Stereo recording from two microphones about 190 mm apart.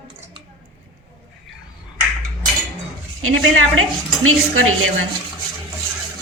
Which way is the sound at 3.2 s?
90° right.